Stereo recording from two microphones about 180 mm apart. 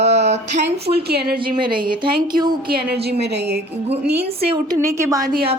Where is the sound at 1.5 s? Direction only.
25° right (ahead or behind).